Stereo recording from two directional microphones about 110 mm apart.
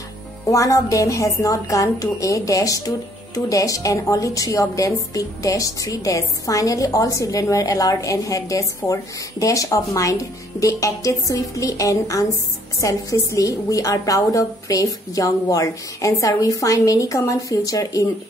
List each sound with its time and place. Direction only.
0.5 s a woman's voice: 30° left (ahead or behind)